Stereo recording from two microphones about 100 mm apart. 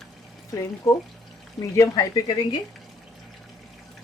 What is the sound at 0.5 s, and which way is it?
Speech, 35° left (ahead or behind).